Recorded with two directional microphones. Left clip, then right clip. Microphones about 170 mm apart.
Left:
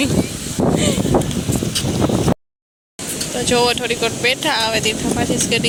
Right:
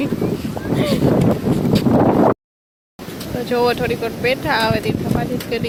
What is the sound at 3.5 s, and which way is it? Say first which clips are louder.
Speech: even; 5° right (ahead or behind).